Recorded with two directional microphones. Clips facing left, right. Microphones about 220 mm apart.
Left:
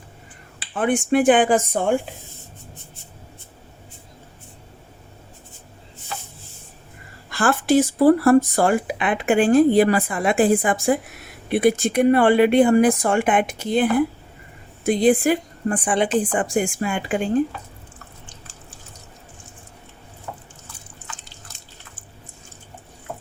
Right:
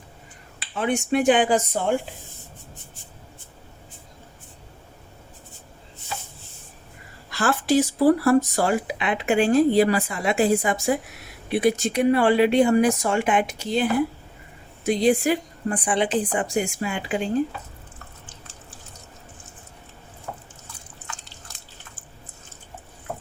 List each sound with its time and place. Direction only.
0.8 s speech: 50° left (ahead or behind)
7.3 s speech: 50° left (ahead or behind)
14.8 s speech: 50° left (ahead or behind)